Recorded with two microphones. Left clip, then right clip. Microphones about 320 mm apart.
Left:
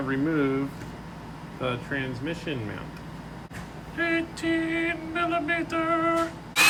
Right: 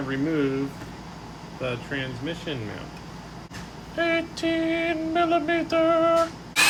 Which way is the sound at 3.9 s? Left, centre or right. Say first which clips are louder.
Right 2 dB; centre.